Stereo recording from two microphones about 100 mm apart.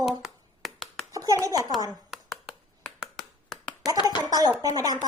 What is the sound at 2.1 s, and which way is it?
Finger snapping, 5° right (ahead or behind).